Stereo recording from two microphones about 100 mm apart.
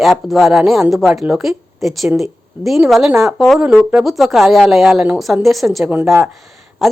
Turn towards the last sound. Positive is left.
turn(degrees=0)  # may be behind; listen again after turning